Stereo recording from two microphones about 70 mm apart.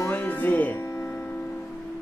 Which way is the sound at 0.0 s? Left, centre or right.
Left.